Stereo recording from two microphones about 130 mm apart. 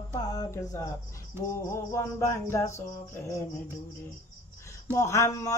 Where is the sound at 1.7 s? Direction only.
20° left (ahead or behind).